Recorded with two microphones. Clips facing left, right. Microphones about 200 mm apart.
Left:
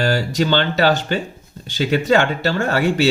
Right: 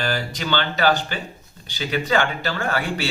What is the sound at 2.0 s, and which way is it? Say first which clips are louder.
Speech: left 4 dB; 45° left (ahead or behind).